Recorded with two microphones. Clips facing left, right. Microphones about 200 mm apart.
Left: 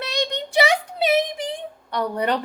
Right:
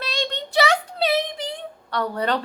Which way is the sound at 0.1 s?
15° left (ahead or behind).